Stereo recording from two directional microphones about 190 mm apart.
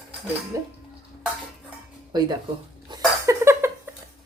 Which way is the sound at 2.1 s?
20° right (ahead or behind).